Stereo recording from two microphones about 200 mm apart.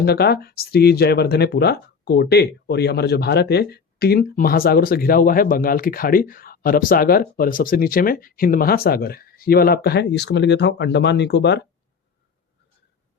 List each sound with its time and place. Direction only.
0.0 s speech: 50° left (ahead or behind)